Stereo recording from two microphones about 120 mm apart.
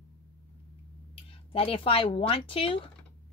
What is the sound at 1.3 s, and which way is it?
Speech, 50° left (ahead or behind).